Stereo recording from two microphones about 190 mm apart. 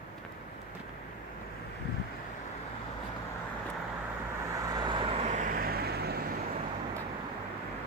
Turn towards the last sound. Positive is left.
turn(degrees=-55)  # may be behind; listen again after turning